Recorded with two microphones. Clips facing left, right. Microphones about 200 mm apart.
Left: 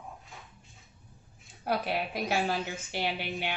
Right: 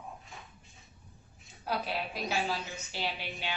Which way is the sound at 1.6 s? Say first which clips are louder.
Left 4 dB; 55° left (ahead or behind).